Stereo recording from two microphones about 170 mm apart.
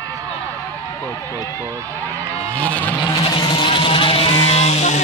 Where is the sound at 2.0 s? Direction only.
10° left (ahead or behind).